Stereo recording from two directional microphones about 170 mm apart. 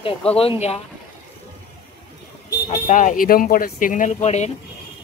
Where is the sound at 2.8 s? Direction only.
50° left (ahead or behind).